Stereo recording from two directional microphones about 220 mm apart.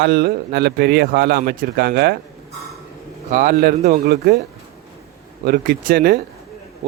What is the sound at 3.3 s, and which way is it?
Speech, 40° right (ahead or behind).